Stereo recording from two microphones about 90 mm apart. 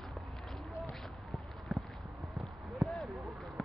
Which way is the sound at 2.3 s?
Centre (ahead or behind).